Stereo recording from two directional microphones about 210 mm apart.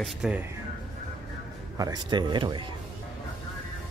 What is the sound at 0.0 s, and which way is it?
Speech, 5° right (ahead or behind).